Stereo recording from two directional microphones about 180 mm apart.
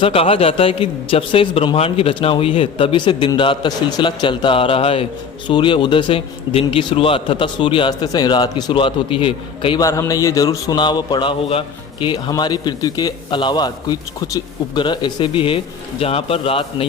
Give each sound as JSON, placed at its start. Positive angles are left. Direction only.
{"t": 0.0, "sound": "a man's voice", "side_deg": 30}